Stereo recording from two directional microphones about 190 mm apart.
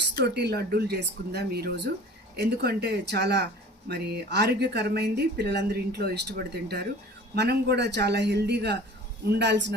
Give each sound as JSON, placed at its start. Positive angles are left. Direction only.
{"t": 0.2, "sound": "speech", "side_deg": -60}